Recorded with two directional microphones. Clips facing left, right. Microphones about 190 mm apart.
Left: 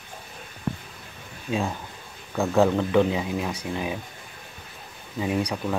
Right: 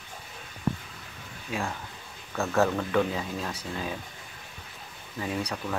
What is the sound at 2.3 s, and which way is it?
Speech, 15° left (ahead or behind).